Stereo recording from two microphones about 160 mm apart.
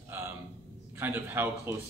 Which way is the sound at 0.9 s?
15° right (ahead or behind).